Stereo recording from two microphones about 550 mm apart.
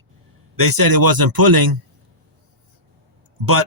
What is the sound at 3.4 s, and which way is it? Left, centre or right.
Speech, right.